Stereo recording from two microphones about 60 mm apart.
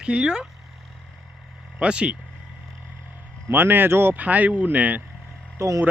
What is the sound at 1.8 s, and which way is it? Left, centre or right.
Speech, centre.